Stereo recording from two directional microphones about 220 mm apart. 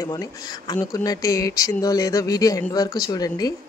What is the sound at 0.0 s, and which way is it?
Speech, 15° left (ahead or behind).